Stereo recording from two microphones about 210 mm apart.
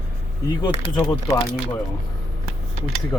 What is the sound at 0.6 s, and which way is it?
Speech, 20° left (ahead or behind).